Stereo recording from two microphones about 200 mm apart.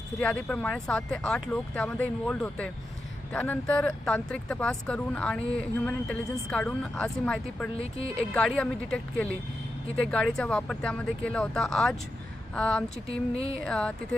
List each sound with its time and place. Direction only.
0.2 s speech: 5° left (ahead or behind)
7.8 s speech: 30° left (ahead or behind)
8.3 s speech: 5° left (ahead or behind)
13.1 s speech: 30° left (ahead or behind)
13.6 s speech: 5° left (ahead or behind)